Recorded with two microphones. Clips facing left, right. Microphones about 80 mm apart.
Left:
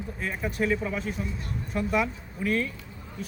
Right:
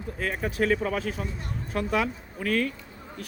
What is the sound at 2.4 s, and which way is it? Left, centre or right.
Speech, right.